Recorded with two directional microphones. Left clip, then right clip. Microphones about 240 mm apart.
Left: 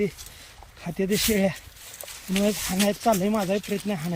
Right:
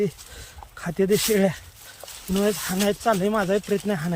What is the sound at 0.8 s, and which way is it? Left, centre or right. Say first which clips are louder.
Speech: right 4 dB; right.